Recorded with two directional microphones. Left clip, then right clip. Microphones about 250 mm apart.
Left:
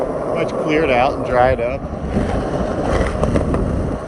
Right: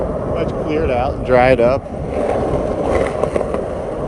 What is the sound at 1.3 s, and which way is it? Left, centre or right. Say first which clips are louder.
Speech: right 4 dB; right.